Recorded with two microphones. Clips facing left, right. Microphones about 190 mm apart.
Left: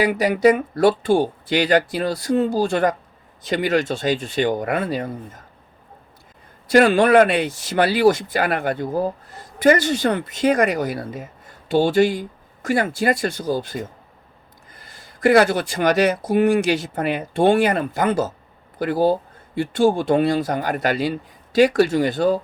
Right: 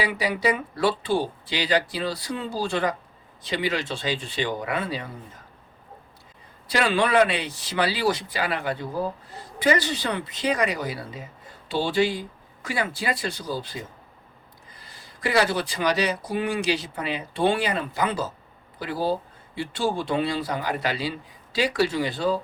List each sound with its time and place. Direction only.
0.0 s speech: 50° left (ahead or behind)
6.7 s speech: 50° left (ahead or behind)
14.8 s speech: 50° left (ahead or behind)